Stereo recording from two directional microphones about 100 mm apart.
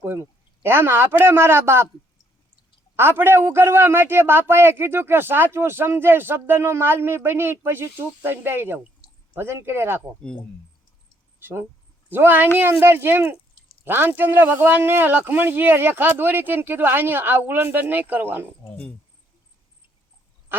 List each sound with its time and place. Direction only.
0.0 s a man's voice: 25° right (ahead or behind)
2.9 s a man's voice: 25° right (ahead or behind)
11.3 s a man's voice: 20° right (ahead or behind)
20.5 s duck: 20° right (ahead or behind)